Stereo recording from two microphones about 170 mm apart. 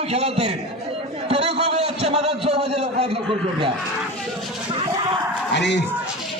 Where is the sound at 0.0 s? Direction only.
40° right (ahead or behind).